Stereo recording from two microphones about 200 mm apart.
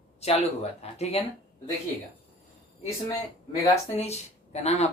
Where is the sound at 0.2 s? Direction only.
30° left (ahead or behind).